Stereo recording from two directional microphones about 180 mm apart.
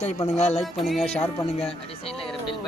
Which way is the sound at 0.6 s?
Centre (ahead or behind).